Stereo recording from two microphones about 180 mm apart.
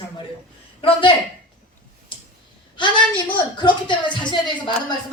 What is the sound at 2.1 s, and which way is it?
Tick-tock, 25° left (ahead or behind).